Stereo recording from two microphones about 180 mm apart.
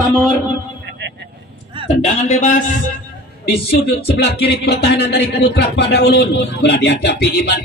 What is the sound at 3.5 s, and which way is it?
Music, 65° left (ahead or behind).